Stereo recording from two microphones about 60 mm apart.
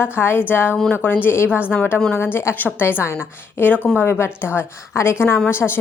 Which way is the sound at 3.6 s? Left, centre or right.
Left.